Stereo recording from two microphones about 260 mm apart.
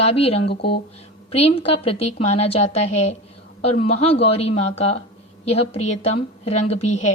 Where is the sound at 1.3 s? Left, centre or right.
Left.